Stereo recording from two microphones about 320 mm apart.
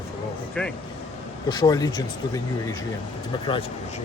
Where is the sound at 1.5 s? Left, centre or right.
Centre.